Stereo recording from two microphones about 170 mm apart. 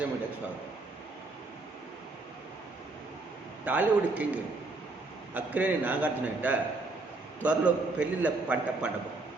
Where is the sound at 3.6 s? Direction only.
10° right (ahead or behind).